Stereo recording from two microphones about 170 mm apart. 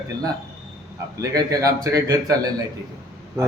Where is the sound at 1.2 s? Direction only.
20° right (ahead or behind).